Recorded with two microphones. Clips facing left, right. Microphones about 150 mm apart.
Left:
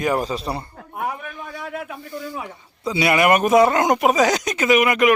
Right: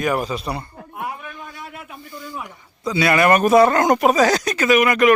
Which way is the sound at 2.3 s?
25° left (ahead or behind).